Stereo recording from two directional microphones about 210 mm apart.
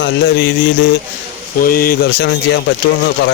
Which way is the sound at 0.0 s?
55° left (ahead or behind).